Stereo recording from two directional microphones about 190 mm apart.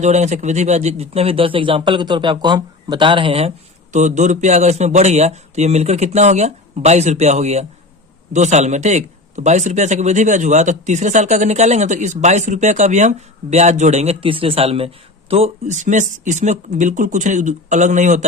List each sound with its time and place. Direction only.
0.0 s a man's voice: 35° right (ahead or behind)